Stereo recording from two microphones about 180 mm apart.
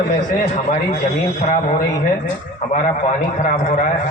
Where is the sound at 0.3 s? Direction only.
40° left (ahead or behind).